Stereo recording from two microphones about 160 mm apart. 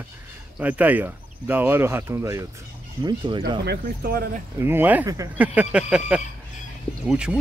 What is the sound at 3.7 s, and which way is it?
Speech, 75° right (ahead or behind).